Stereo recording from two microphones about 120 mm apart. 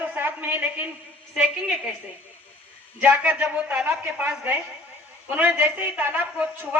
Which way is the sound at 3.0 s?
15° right (ahead or behind).